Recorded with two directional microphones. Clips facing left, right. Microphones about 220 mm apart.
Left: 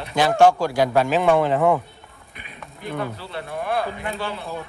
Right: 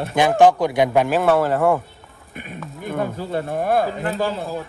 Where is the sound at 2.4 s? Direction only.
50° right (ahead or behind).